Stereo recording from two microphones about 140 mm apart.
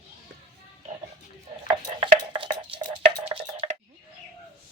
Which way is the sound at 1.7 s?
35° right (ahead or behind).